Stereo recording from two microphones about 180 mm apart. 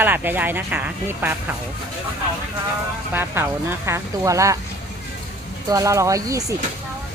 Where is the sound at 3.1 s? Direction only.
10° right (ahead or behind).